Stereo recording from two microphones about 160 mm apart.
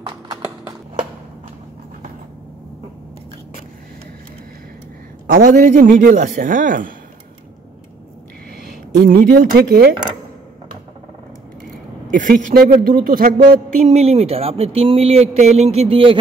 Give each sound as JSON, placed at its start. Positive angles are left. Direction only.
{"t": 5.2, "sound": "a man's voice", "side_deg": -55}
{"t": 9.0, "sound": "speech", "side_deg": -80}
{"t": 12.1, "sound": "a man's voice", "side_deg": -55}
{"t": 13.8, "sound": "speech", "side_deg": -40}